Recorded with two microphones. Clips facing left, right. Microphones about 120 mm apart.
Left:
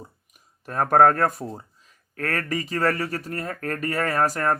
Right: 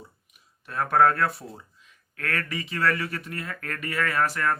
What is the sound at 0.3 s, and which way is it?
Speech, 40° left (ahead or behind).